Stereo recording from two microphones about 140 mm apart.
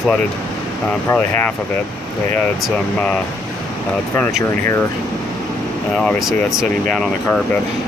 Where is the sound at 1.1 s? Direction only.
15° left (ahead or behind).